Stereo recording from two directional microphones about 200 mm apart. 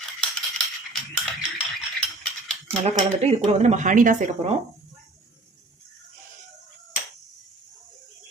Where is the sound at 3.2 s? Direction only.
30° right (ahead or behind).